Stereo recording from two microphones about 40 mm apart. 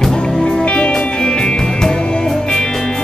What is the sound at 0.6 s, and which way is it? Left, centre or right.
Music, left.